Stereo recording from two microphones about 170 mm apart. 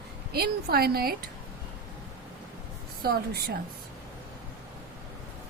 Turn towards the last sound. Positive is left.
turn(degrees=-65)  # may be behind; listen again after turning